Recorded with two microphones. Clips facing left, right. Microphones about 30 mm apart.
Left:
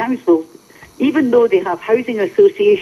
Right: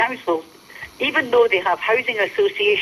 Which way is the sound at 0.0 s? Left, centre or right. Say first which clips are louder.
Left 6 dB; right.